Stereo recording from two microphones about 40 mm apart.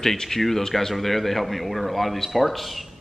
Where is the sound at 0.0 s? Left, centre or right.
Centre.